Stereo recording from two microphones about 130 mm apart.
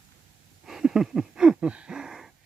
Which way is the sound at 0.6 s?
5° right (ahead or behind).